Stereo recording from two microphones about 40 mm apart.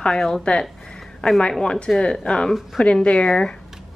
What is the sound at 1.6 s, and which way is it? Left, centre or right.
Speech, centre.